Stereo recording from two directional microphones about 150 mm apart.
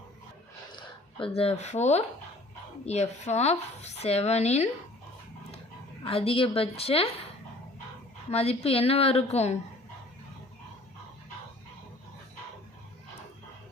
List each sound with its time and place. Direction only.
0.7 s a sound: 30° left (ahead or behind)
1.4 s speech: 45° left (ahead or behind)
6.1 s a woman's voice: 40° left (ahead or behind)
8.3 s speech: 45° left (ahead or behind)